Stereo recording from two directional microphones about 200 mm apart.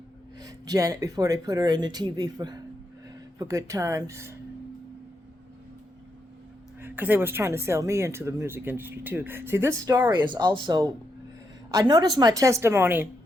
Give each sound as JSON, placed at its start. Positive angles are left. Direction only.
{"t": 0.3, "sound": "speech", "side_deg": -20}
{"t": 6.7, "sound": "speech", "side_deg": -10}